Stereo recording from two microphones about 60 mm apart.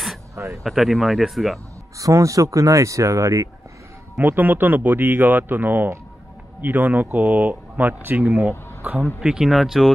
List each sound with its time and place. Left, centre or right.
0.7 s speech: centre
2.0 s speech: right
4.2 s speech: right
9.2 s speech: centre